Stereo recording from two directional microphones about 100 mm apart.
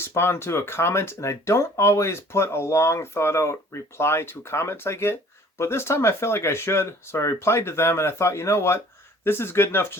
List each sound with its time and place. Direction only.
0.1 s speech: 25° left (ahead or behind)